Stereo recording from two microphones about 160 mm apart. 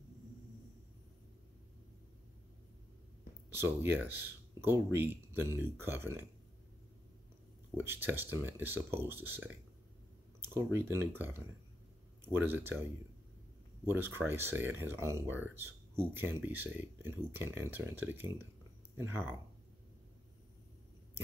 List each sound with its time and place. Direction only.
3.4 s speech: 15° right (ahead or behind)
7.7 s speech: 15° right (ahead or behind)
13.8 s speech: 15° right (ahead or behind)